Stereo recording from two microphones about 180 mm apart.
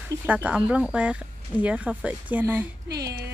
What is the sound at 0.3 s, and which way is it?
Speech, 5° right (ahead or behind).